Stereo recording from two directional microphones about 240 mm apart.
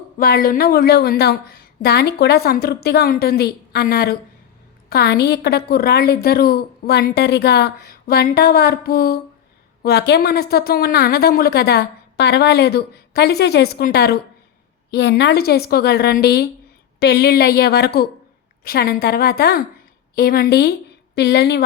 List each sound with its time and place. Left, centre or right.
0.2 s a woman's voice: left